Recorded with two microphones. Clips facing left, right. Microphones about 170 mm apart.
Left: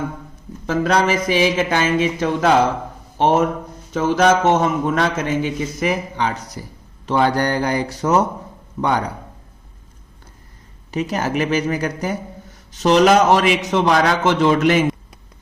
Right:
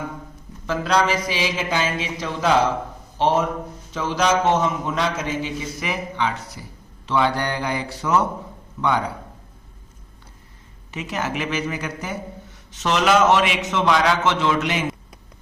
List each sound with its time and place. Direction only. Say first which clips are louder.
0.7 s a man's voice: left 3 dB; 50° left (ahead or behind)
10.9 s a man's voice: left 6 dB; 40° left (ahead or behind)